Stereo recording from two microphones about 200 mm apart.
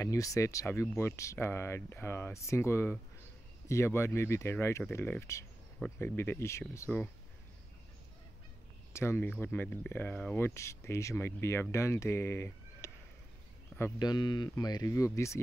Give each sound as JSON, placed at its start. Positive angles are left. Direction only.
{"t": 0.0, "sound": "speech", "side_deg": 15}
{"t": 8.9, "sound": "speech", "side_deg": 10}